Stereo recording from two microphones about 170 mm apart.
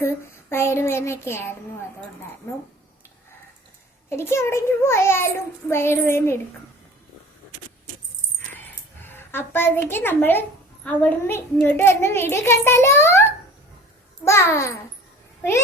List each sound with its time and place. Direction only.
0.5 s a child's voice: 15° left (ahead or behind)
4.1 s a child's voice: 15° left (ahead or behind)
9.0 s a child's voice: 15° left (ahead or behind)
14.3 s a child's voice: 15° left (ahead or behind)